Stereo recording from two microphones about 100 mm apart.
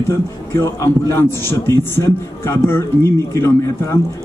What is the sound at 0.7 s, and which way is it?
A man's voice, 30° left (ahead or behind).